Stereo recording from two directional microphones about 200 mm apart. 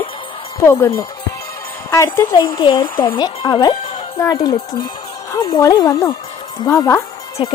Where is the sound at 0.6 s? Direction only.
15° left (ahead or behind).